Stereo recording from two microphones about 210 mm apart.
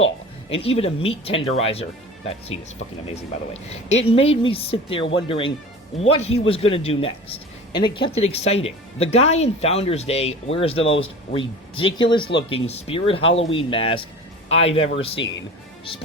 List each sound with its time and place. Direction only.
0.5 s speech: 30° left (ahead or behind)
15.2 s speech: 60° left (ahead or behind)